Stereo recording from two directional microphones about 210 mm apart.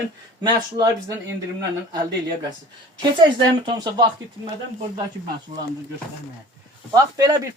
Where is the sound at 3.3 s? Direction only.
20° right (ahead or behind).